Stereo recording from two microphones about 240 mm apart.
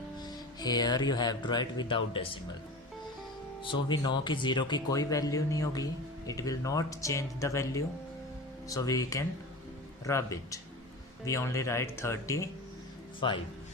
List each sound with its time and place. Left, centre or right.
0.2 s speech: centre
3.6 s speech: centre